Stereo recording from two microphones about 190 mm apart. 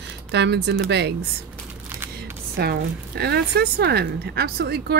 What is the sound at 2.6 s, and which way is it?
Speech, 60° right (ahead or behind).